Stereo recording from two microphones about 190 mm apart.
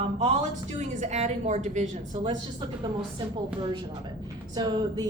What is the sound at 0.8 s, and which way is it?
A woman's voice, 40° right (ahead or behind).